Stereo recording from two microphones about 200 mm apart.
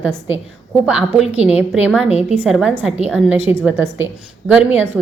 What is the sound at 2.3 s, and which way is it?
A woman's voice, 5° right (ahead or behind).